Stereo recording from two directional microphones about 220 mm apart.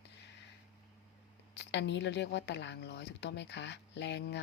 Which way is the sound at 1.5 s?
50° left (ahead or behind).